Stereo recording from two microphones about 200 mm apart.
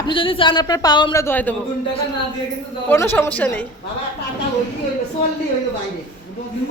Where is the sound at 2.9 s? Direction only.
10° left (ahead or behind).